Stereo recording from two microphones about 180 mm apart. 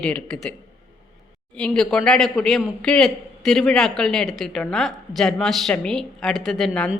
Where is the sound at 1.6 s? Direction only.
5° left (ahead or behind).